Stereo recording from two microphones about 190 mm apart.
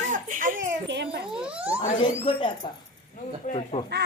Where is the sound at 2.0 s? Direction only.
30° left (ahead or behind).